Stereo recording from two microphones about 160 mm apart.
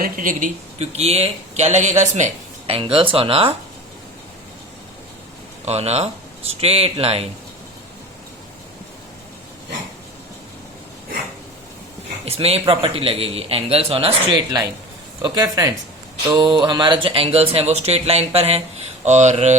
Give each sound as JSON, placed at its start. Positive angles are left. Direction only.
{"t": 0.0, "sound": "speech", "side_deg": -55}
{"t": 5.6, "sound": "speech", "side_deg": -40}
{"t": 12.2, "sound": "speech", "side_deg": -40}
{"t": 19.0, "sound": "mantra", "side_deg": -45}